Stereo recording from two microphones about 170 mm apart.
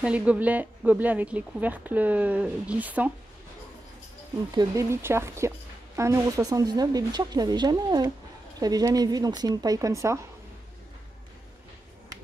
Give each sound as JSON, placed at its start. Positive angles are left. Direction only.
{"t": 0.0, "sound": "a woman's voice", "side_deg": -10}
{"t": 4.6, "sound": "a woman's voice", "side_deg": -15}